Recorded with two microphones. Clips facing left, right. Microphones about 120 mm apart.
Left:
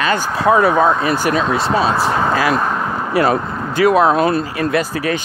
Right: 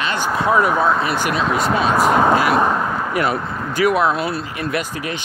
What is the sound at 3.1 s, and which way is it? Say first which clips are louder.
Speech: left 9 dB; 40° left (ahead or behind).